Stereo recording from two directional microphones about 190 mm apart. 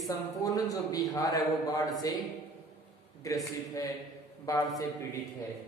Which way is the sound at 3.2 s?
15° left (ahead or behind).